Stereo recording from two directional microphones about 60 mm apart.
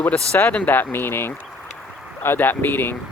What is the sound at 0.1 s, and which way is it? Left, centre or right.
Speech, left.